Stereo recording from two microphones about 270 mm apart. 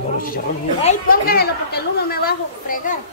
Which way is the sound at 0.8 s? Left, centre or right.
Left.